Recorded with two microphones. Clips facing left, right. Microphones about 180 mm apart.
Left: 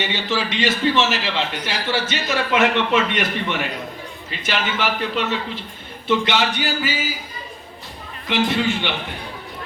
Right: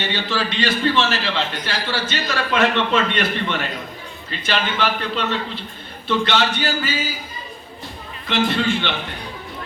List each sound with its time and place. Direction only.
0.0 s a man's voice: 15° left (ahead or behind)
8.4 s a man's voice: 15° left (ahead or behind)